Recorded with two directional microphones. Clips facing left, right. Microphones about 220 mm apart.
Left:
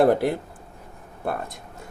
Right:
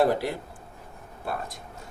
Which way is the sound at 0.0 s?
55° left (ahead or behind).